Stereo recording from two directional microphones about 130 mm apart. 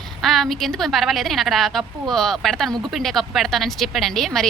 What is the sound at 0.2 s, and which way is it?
A woman's voice, centre (ahead or behind).